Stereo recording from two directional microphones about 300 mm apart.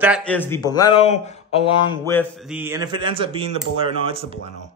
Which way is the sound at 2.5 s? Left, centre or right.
Centre.